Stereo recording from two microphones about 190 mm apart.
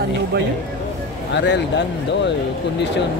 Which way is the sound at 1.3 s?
65° left (ahead or behind).